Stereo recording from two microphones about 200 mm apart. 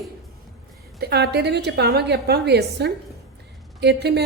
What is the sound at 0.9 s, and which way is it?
A woman's voice, 55° right (ahead or behind).